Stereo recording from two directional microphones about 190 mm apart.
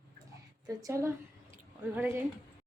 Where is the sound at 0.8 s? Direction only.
15° right (ahead or behind).